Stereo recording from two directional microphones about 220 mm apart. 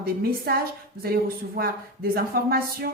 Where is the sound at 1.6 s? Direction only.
45° right (ahead or behind).